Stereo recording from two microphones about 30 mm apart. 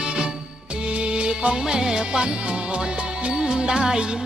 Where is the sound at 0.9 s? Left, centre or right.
Right.